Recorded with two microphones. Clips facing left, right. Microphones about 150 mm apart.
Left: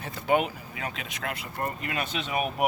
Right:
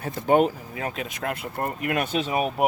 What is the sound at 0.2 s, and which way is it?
Speech, 40° right (ahead or behind).